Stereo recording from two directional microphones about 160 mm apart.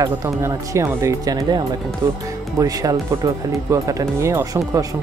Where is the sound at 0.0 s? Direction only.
20° right (ahead or behind).